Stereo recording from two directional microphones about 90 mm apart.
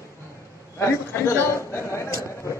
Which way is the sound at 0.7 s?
30° left (ahead or behind).